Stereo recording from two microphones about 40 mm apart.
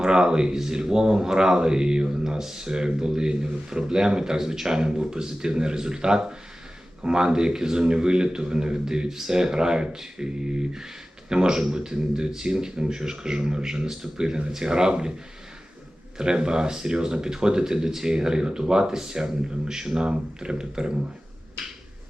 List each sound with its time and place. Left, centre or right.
0.0 s speech: centre
11.3 s speech: centre
16.1 s speech: right